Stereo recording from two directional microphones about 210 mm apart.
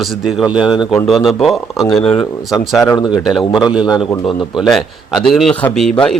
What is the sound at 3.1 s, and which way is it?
A man's voice, centre (ahead or behind).